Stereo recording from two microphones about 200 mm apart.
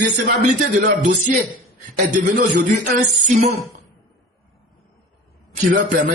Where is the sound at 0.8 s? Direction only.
40° right (ahead or behind).